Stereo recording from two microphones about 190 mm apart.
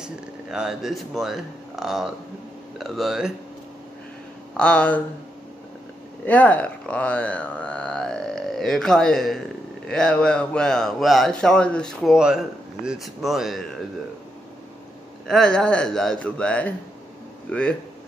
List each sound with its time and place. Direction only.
0.0 s speech: 5° right (ahead or behind)
4.6 s speech: 5° left (ahead or behind)
6.2 s speech: 10° left (ahead or behind)
15.2 s speech: 5° left (ahead or behind)